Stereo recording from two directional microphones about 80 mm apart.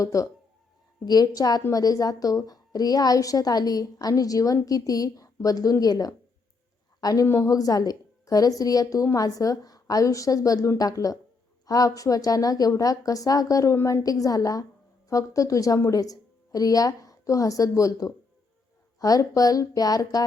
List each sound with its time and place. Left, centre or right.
0.0 s a woman's voice: left